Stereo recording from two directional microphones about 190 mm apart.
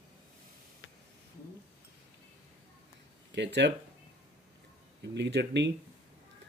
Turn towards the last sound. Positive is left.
turn(degrees=-65)  # may be behind; listen again after turning